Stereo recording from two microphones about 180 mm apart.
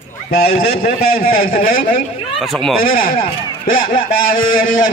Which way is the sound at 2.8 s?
55° left (ahead or behind).